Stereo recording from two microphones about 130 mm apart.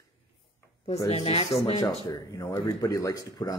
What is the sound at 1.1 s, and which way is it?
Speech, 45° left (ahead or behind).